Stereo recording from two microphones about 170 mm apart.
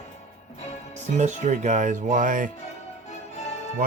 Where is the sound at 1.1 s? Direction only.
45° right (ahead or behind).